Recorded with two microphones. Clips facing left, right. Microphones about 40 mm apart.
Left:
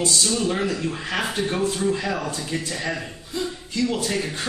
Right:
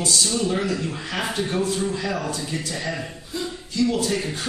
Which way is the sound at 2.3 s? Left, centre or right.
Left.